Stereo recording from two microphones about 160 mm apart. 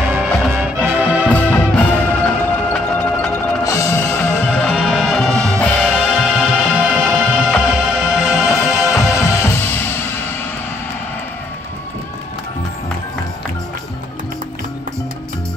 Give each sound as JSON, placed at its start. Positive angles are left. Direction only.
{"t": 0.0, "sound": "music", "side_deg": -10}
{"t": 1.2, "sound": "music", "side_deg": 10}
{"t": 6.2, "sound": "music", "side_deg": -5}
{"t": 9.2, "sound": "music", "side_deg": 15}